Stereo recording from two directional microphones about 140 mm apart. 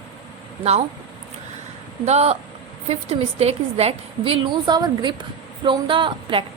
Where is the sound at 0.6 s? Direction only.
50° right (ahead or behind).